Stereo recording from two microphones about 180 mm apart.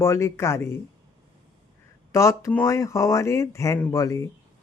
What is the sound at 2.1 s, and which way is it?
Speech, 15° left (ahead or behind).